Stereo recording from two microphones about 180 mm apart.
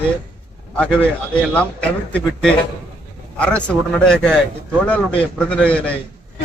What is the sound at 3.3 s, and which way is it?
A man's voice, 5° left (ahead or behind).